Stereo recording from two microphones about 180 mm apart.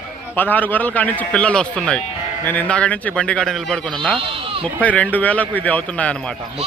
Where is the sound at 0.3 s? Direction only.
10° left (ahead or behind).